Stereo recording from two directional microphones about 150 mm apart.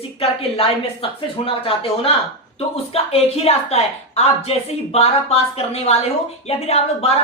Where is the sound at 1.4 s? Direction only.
40° left (ahead or behind).